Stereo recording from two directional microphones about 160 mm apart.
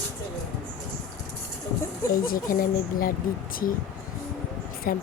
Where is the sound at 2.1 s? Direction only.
60° left (ahead or behind).